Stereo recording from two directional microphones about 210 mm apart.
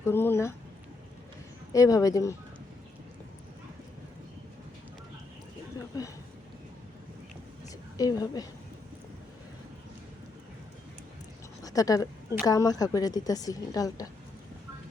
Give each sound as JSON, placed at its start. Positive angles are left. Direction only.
{"t": 0.0, "sound": "a woman's voice", "side_deg": 10}
{"t": 1.7, "sound": "a woman's voice", "side_deg": 15}
{"t": 7.9, "sound": "a woman's voice", "side_deg": 15}
{"t": 11.6, "sound": "a sound", "side_deg": 15}
{"t": 12.5, "sound": "a woman's voice", "side_deg": 15}